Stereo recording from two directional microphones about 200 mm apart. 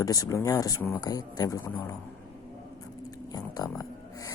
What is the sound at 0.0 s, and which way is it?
Speech, 20° left (ahead or behind).